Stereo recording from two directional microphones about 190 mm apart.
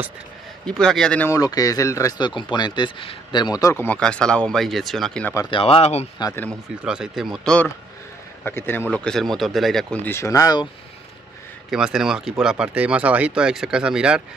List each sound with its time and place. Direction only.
0.7 s speech: 5° left (ahead or behind)
5.3 s speech: 15° left (ahead or behind)
5.6 s speech: 30° left (ahead or behind)
6.1 s speech: 20° left (ahead or behind)
6.8 s speech: 5° right (ahead or behind); by 10.7 s 20° left (ahead or behind)
11.7 s speech: 5° right (ahead or behind)